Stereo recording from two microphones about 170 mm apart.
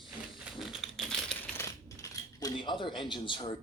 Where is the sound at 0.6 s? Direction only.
Centre (ahead or behind).